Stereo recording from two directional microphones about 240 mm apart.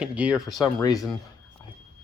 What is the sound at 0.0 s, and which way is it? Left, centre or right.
Speech, centre.